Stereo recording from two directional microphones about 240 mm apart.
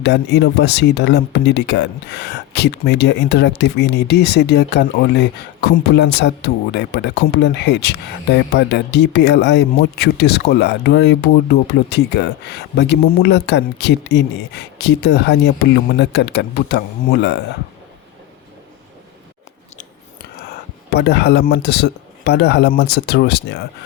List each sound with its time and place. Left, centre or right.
0.0 s speech: left
20.5 s speech: left